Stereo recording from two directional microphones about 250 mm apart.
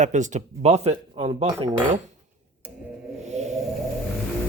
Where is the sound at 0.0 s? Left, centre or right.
Right.